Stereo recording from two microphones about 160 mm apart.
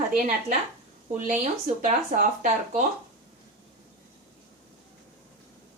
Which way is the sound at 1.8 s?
55° right (ahead or behind).